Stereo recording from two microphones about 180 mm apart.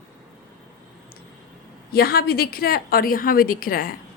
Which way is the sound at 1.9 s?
60° left (ahead or behind).